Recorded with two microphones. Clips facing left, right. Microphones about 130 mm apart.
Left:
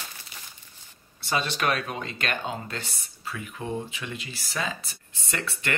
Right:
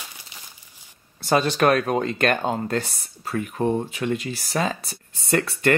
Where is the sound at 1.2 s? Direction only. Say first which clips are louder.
Right 8 dB; 45° right (ahead or behind).